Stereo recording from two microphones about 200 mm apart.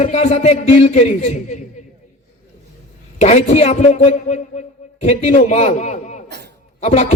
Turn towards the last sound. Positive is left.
turn(degrees=35)  # may be behind; listen again after turning